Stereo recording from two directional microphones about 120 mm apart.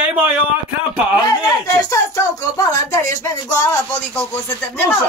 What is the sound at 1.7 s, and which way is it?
Speech, 25° left (ahead or behind).